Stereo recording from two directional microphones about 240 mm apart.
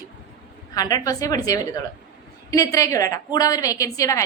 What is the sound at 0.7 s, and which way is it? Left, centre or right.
A woman's voice, centre.